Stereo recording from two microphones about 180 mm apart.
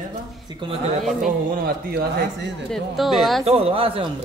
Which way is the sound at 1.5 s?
55° right (ahead or behind).